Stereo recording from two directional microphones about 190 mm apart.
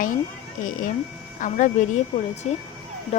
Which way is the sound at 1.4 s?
40° left (ahead or behind).